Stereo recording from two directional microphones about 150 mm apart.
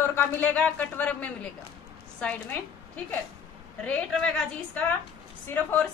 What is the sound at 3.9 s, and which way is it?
A woman's voice, 5° left (ahead or behind).